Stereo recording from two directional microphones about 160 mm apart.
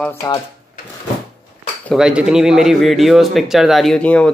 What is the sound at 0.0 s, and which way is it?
Speech, 20° left (ahead or behind).